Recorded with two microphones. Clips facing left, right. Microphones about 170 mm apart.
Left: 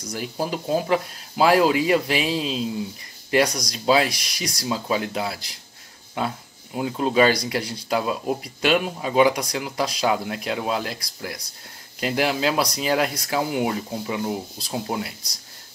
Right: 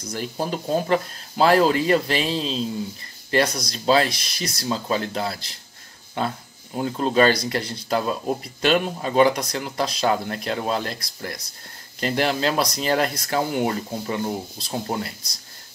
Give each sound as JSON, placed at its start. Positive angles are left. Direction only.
{"t": 0.0, "sound": "speech", "side_deg": 10}